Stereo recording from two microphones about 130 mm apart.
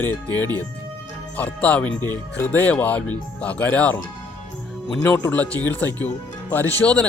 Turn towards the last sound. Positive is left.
turn(degrees=10)  # may be behind; listen again after turning